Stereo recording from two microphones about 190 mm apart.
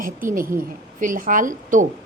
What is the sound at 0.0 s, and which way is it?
A woman's voice, 45° right (ahead or behind).